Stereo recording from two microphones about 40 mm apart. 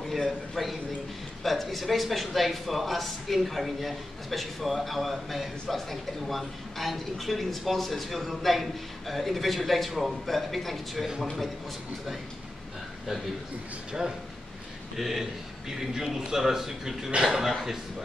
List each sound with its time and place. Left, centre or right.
0.1 s a man's voice: centre
15.0 s a man's voice: centre
17.5 s a man's voice: centre